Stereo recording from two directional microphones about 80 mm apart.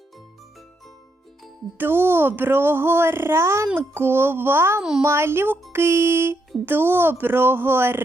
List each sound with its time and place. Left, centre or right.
1.8 s speech: right
4.8 s a child's voice: centre
5.0 s music: right
6.7 s speech: right